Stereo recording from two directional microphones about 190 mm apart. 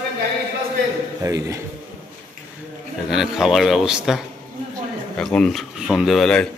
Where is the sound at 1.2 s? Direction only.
15° right (ahead or behind).